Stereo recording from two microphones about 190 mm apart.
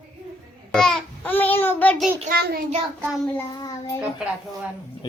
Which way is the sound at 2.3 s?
55° right (ahead or behind).